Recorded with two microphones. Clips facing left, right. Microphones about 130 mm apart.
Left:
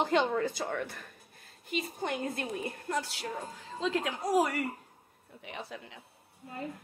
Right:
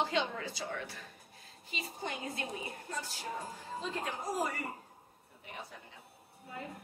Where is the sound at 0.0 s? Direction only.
50° left (ahead or behind); by 3.3 s 75° left (ahead or behind).